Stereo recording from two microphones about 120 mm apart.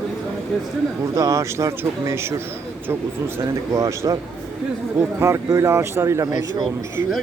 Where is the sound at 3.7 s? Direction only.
25° right (ahead or behind).